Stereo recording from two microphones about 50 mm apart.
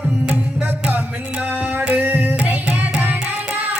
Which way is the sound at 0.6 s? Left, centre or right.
Right.